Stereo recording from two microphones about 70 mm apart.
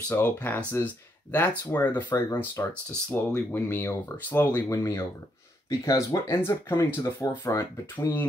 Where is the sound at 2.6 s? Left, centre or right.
Left.